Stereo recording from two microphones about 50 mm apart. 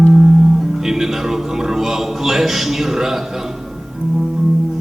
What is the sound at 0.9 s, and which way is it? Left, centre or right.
Music, centre.